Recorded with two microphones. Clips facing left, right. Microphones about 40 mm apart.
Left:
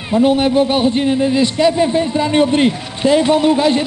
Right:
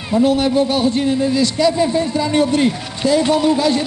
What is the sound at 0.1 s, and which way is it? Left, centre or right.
A man's voice, left.